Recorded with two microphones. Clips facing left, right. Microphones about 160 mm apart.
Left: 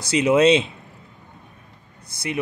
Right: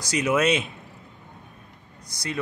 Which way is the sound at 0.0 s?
25° left (ahead or behind).